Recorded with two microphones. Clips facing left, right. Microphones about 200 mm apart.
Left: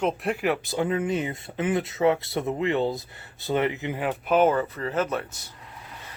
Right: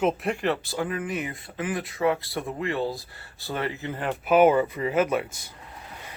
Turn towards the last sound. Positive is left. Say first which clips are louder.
# right 3 dB
turn(degrees=-10)  # may be behind; listen again after turning